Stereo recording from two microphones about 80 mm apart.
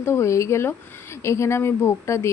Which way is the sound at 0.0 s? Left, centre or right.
Left.